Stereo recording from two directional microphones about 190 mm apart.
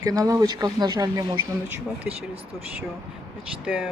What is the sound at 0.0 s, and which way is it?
Speech, 15° right (ahead or behind).